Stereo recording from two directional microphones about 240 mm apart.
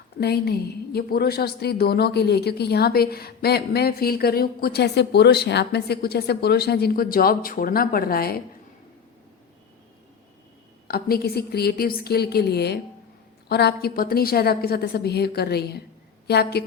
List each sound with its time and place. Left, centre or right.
0.2 s a woman's voice: left
10.8 s a woman's voice: left